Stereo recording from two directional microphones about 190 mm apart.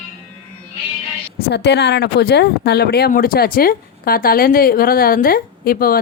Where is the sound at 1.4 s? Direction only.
60° left (ahead or behind).